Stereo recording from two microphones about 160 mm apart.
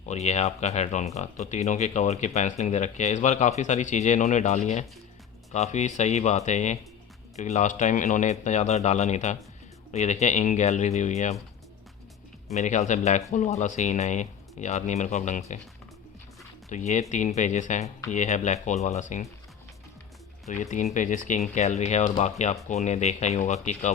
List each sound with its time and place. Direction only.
0.0 s speech: 45° left (ahead or behind)
12.5 s speech: 50° left (ahead or behind)
16.6 s speech: 45° left (ahead or behind)
20.5 s speech: 50° left (ahead or behind)